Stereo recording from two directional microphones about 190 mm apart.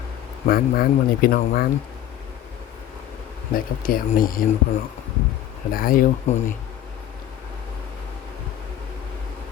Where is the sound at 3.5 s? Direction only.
50° left (ahead or behind).